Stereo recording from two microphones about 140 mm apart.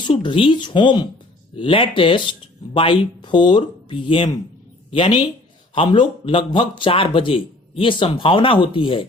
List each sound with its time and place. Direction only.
0.2 s speech: 35° left (ahead or behind)
5.7 s speech: 35° left (ahead or behind)